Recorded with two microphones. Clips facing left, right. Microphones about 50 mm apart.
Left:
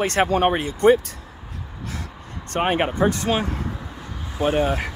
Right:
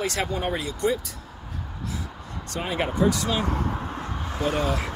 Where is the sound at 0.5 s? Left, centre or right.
Left.